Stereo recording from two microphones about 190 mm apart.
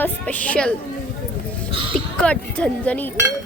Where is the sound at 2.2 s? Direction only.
5° left (ahead or behind).